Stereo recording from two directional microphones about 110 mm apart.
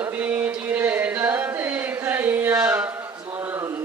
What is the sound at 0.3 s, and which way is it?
Music, 15° right (ahead or behind).